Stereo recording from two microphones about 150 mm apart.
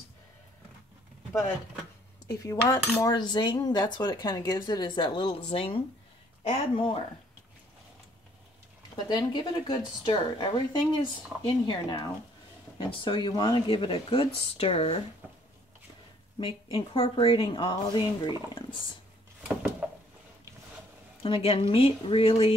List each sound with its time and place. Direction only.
2.2 s speech: 25° left (ahead or behind)
8.9 s speech: 30° left (ahead or behind)
16.7 s speech: 35° left (ahead or behind)
19.4 s a sound: 5° right (ahead or behind)
21.2 s speech: 40° left (ahead or behind)